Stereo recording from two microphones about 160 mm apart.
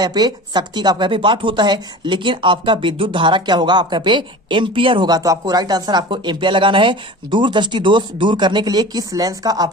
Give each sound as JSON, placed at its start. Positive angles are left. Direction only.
{"t": 0.0, "sound": "speech", "side_deg": -25}